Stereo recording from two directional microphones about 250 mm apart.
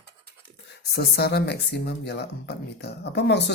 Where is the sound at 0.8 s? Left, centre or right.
Left.